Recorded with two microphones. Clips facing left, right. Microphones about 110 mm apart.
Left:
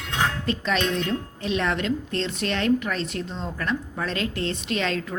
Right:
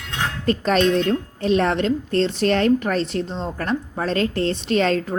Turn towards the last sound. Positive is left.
turn(degrees=-40)  # may be behind; listen again after turning